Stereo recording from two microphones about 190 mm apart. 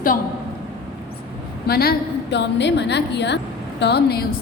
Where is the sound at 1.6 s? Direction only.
55° left (ahead or behind).